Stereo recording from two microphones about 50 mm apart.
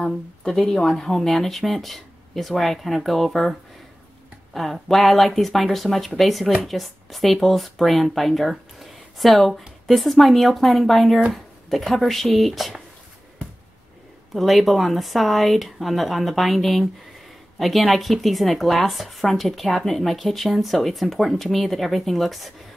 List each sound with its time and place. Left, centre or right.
0.0 s a woman's voice: centre
4.6 s speech: centre
14.3 s speech: centre